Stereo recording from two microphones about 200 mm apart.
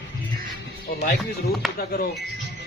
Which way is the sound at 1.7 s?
50° left (ahead or behind).